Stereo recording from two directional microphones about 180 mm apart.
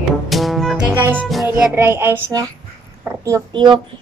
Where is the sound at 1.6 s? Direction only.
15° right (ahead or behind).